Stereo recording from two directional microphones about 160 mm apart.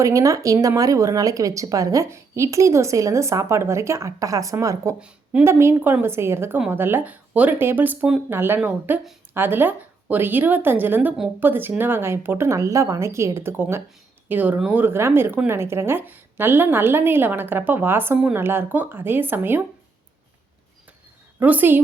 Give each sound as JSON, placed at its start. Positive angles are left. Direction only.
{"t": 0.0, "sound": "speech", "side_deg": -20}
{"t": 4.9, "sound": "a woman's voice", "side_deg": -5}
{"t": 21.3, "sound": "a woman's voice", "side_deg": -10}